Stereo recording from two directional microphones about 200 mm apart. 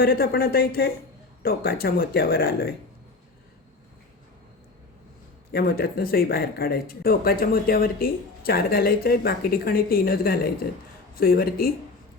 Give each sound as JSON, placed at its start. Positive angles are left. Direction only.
{"t": 0.0, "sound": "speech", "side_deg": 50}
{"t": 5.5, "sound": "speech", "side_deg": 50}